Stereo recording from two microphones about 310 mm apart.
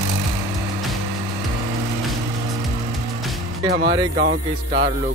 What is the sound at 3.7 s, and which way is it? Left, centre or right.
Speech, right.